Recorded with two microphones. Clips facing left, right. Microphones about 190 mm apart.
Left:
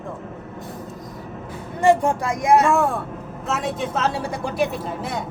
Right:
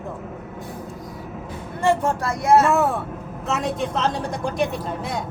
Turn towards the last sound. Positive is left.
turn(degrees=0)  # may be behind; listen again after turning